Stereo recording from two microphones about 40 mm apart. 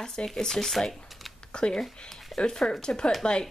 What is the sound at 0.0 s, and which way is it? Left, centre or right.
Speech, centre.